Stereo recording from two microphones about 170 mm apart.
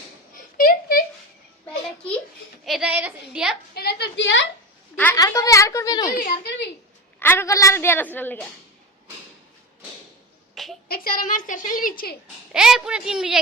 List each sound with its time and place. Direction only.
0.3 s a sound: 55° left (ahead or behind)
2.6 s a woman's voice: 5° right (ahead or behind)
3.8 s a sound: 70° left (ahead or behind); by 4.4 s 90° left
5.1 s a woman's voice: 20° left (ahead or behind)
6.1 s a woman's voice: 65° left (ahead or behind)
7.2 s a woman's voice: 15° left (ahead or behind)
10.5 s a sound: centre (ahead or behind)
10.8 s a woman's voice: 60° left (ahead or behind)
12.5 s a woman's voice: 5° right (ahead or behind)